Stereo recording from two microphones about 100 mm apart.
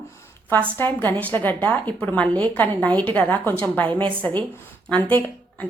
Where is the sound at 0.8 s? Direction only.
20° left (ahead or behind).